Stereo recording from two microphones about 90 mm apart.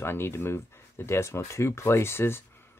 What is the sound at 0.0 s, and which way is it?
Speech, 25° left (ahead or behind).